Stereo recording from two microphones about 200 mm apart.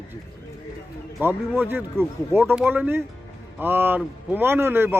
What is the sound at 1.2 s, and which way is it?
Speech, 10° right (ahead or behind).